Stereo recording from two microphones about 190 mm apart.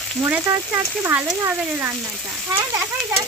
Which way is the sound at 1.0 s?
10° right (ahead or behind).